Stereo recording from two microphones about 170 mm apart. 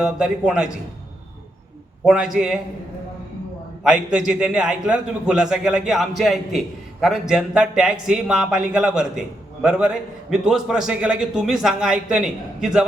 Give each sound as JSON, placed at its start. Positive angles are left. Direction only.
{"t": 0.0, "sound": "speech", "side_deg": -5}
{"t": 2.0, "sound": "speech", "side_deg": -5}
{"t": 3.8, "sound": "speech", "side_deg": -5}